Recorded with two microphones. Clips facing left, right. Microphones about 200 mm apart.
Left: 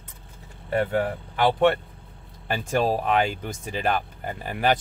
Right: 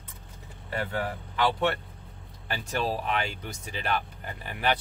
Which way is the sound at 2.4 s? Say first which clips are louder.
Left 7 dB; 50° left (ahead or behind).